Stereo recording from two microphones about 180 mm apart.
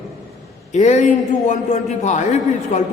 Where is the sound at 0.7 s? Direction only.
40° left (ahead or behind).